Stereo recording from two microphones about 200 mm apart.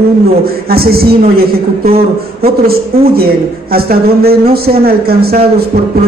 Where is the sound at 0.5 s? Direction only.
50° right (ahead or behind).